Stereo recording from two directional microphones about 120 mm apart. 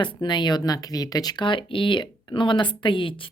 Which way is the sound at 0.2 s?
40° left (ahead or behind).